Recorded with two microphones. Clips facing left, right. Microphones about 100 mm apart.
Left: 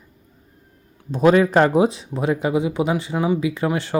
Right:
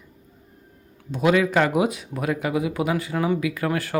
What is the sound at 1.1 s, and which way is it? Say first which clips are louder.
Speech: left 5 dB; 35° left (ahead or behind).